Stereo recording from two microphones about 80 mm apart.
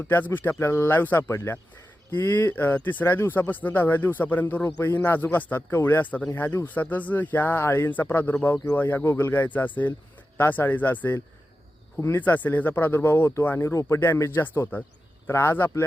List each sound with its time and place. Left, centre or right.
0.0 s speech: left
11.9 s speech: left
12.2 s speech: left
13.7 s speech: left